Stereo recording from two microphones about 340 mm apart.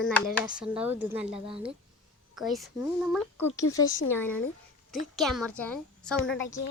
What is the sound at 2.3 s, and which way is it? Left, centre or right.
Speech, centre.